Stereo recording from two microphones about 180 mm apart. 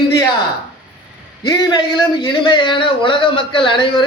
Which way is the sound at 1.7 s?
25° left (ahead or behind).